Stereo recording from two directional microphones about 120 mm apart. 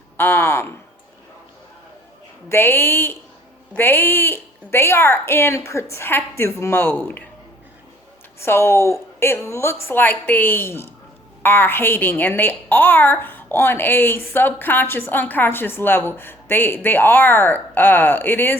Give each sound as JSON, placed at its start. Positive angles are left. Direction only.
{"t": 0.2, "sound": "speech", "side_deg": 20}
{"t": 2.5, "sound": "speech", "side_deg": 20}
{"t": 8.4, "sound": "a woman's voice", "side_deg": 20}